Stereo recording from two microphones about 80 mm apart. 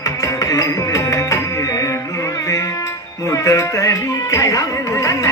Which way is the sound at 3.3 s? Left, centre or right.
Left.